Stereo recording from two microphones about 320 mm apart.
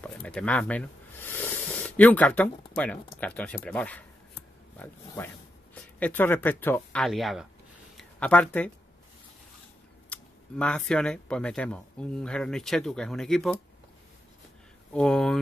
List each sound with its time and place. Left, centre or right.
0.0 s speech: centre
10.0 s speech: centre
15.0 s speech: centre